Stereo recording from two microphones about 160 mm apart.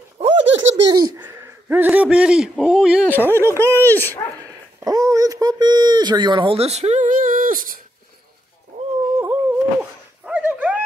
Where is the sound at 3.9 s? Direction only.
10° left (ahead or behind).